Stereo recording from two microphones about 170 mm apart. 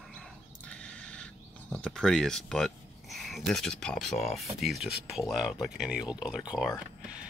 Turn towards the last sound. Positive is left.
turn(degrees=0)  # may be behind; listen again after turning